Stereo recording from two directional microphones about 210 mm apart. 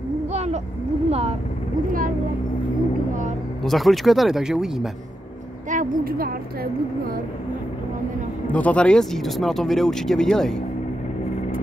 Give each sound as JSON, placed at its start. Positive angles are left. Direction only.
{"t": 0.3, "sound": "a sound", "side_deg": -30}
{"t": 3.6, "sound": "speech", "side_deg": 0}
{"t": 5.7, "sound": "a woman's voice", "side_deg": -40}
{"t": 8.5, "sound": "speech", "side_deg": 5}